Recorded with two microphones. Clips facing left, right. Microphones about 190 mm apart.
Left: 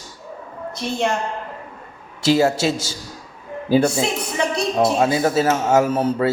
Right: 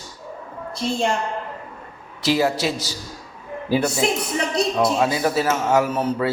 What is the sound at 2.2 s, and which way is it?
Speech, 25° left (ahead or behind).